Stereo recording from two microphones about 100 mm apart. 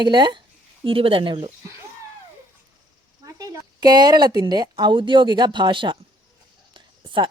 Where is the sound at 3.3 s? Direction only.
35° right (ahead or behind); by 6.0 s 55° right (ahead or behind).